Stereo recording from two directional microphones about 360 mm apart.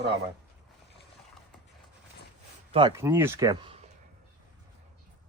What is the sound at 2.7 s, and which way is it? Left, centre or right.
Speech, centre.